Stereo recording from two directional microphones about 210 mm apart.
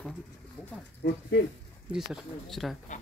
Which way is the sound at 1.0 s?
55° left (ahead or behind).